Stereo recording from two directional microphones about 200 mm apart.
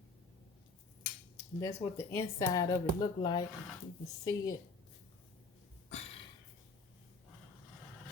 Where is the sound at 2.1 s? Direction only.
15° left (ahead or behind).